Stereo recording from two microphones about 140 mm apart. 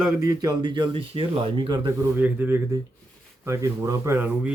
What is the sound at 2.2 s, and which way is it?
A man's voice, 15° right (ahead or behind).